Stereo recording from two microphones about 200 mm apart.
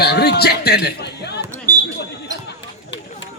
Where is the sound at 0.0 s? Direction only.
55° left (ahead or behind).